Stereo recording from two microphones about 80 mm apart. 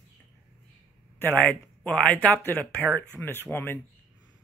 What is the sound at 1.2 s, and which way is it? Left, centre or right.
Speech, left.